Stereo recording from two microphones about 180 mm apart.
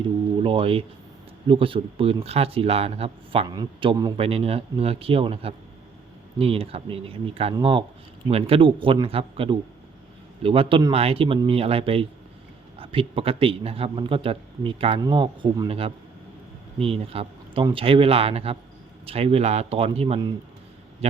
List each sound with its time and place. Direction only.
0.4 s a man's voice: 30° right (ahead or behind)